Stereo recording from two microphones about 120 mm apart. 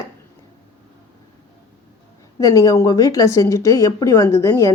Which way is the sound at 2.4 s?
25° left (ahead or behind).